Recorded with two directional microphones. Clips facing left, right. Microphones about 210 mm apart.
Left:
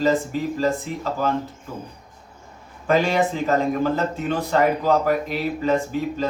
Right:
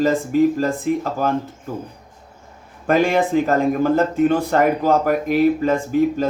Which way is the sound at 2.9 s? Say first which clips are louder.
Right 3 dB; 50° right (ahead or behind).